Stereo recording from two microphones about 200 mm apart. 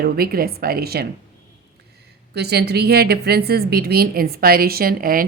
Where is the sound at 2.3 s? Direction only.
55° right (ahead or behind).